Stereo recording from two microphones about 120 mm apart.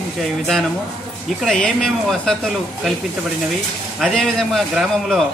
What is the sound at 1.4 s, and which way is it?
Speech, 5° left (ahead or behind).